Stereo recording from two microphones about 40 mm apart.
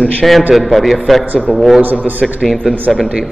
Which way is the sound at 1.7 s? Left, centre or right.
Right.